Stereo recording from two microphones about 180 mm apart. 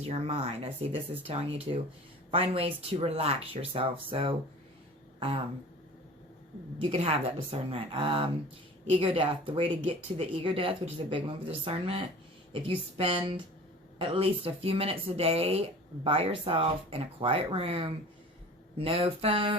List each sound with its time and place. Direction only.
0.0 s speech: 35° right (ahead or behind)
6.9 s speech: 35° right (ahead or behind)